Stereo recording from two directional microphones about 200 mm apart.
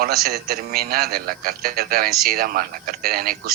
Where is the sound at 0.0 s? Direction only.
50° right (ahead or behind).